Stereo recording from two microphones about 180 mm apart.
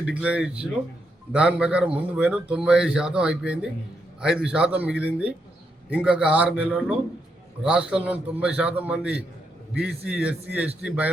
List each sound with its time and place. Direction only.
0.0 s a man's voice: 5° right (ahead or behind)